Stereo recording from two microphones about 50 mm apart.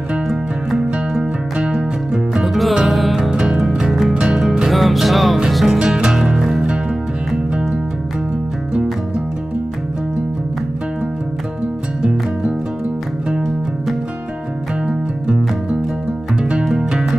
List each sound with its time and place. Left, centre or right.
0.3 s music: centre
0.9 s music: centre
2.4 s music: centre
3.3 s music: centre
4.1 s music: centre
4.6 s music: centre
12.0 s music: centre
16.7 s music: centre